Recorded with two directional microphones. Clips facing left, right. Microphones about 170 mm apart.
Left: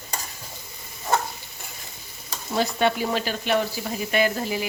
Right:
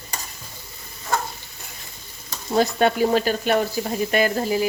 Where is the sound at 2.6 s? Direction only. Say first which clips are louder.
Right 4 dB; 45° right (ahead or behind).